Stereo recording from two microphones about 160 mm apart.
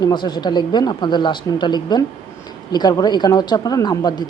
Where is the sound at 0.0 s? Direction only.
25° left (ahead or behind).